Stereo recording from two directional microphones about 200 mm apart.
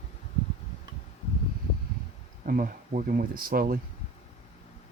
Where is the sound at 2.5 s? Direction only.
45° right (ahead or behind).